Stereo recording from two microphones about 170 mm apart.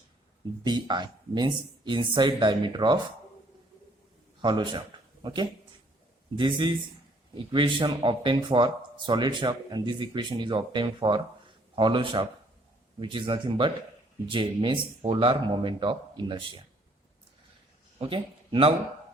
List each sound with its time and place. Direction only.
0.6 s speech: 25° right (ahead or behind)
4.4 s speech: 25° right (ahead or behind)
18.0 s speech: 30° right (ahead or behind)